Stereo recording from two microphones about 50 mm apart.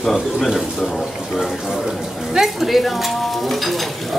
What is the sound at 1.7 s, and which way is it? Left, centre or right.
Speech, centre.